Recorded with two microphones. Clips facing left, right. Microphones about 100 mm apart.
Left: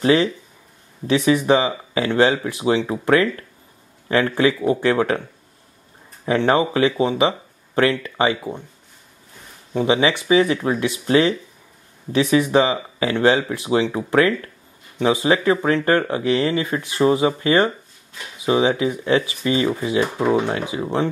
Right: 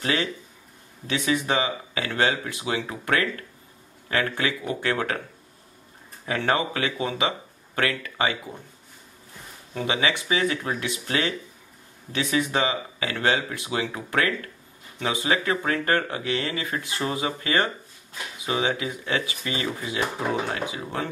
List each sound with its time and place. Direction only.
0.0 s speech: 30° left (ahead or behind)
6.2 s speech: 25° left (ahead or behind)
9.8 s speech: 25° left (ahead or behind)